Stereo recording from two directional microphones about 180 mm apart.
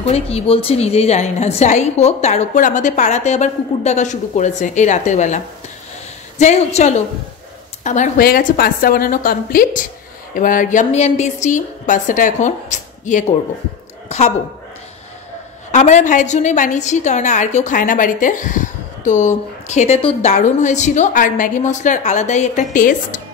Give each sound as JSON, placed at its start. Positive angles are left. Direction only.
{"t": 0.1, "sound": "a woman's voice", "side_deg": 35}
{"t": 15.7, "sound": "a woman's voice", "side_deg": 40}